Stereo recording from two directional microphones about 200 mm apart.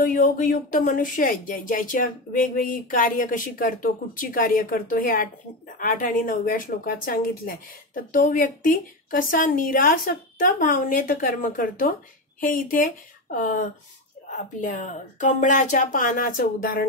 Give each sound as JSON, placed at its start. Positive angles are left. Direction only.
{"t": 0.0, "sound": "speech", "side_deg": 40}